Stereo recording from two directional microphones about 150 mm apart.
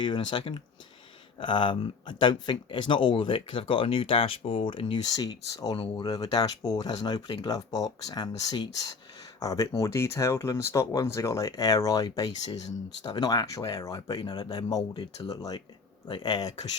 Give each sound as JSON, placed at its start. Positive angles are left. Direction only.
{"t": 0.0, "sound": "speech", "side_deg": 30}
{"t": 5.8, "sound": "speech", "side_deg": 40}
{"t": 6.1, "sound": "speech", "side_deg": 25}